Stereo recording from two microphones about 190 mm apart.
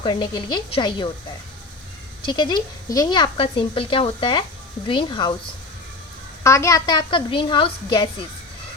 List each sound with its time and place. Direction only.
0.0 s speech: 25° left (ahead or behind)
2.2 s speech: 25° left (ahead or behind)
6.4 s speech: 15° left (ahead or behind)